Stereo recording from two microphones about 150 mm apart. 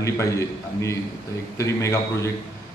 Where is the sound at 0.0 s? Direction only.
20° left (ahead or behind).